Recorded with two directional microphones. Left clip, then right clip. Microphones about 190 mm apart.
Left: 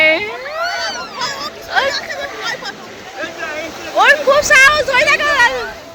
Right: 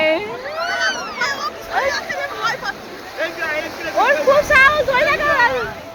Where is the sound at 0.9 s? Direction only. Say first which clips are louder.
Right 1 dB; 15° right (ahead or behind).